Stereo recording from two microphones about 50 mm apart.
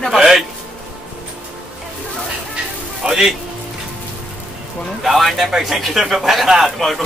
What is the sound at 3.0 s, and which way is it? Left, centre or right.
Speech, centre.